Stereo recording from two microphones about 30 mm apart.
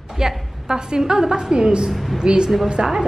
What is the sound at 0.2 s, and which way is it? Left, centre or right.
A woman's voice, right.